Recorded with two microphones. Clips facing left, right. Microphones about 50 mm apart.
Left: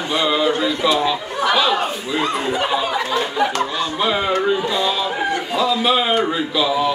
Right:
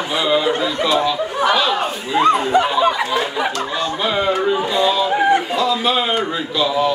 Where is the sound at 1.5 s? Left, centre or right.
Centre.